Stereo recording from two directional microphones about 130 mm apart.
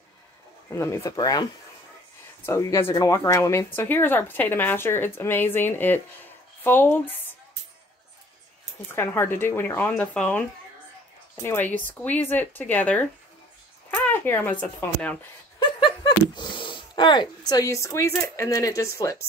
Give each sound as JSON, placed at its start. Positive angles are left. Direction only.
{"t": 0.7, "sound": "speech", "side_deg": 20}
{"t": 8.9, "sound": "speech", "side_deg": 20}
{"t": 11.4, "sound": "speech", "side_deg": 15}
{"t": 15.6, "sound": "speech", "side_deg": 35}